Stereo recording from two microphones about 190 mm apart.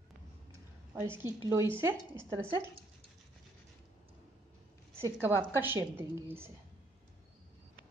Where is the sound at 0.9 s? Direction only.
10° right (ahead or behind).